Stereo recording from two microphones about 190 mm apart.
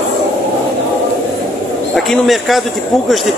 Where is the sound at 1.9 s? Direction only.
Centre (ahead or behind).